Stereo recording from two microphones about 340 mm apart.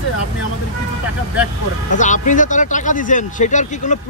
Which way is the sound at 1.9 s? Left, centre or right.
Left.